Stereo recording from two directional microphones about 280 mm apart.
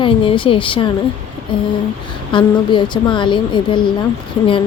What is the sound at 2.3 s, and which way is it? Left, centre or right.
A woman's voice, centre.